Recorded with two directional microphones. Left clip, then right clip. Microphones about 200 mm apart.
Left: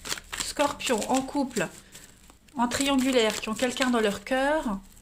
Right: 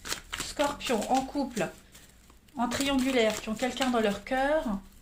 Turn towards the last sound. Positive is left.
turn(degrees=45)  # may be behind; listen again after turning